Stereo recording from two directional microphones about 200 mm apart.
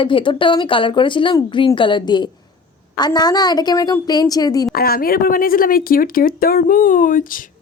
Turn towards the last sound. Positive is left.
turn(degrees=45)  # may be behind; listen again after turning